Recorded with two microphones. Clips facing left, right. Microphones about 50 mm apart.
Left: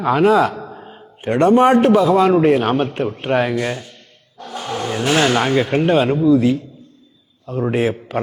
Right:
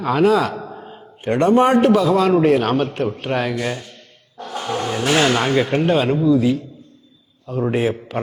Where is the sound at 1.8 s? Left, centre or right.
Centre.